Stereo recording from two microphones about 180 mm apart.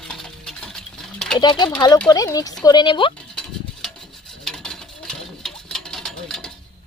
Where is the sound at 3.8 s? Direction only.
Centre (ahead or behind).